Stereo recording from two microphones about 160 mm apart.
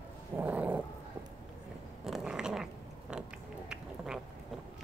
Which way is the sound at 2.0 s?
5° right (ahead or behind).